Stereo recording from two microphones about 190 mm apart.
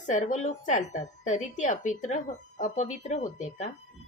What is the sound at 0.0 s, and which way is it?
Speech, 40° left (ahead or behind).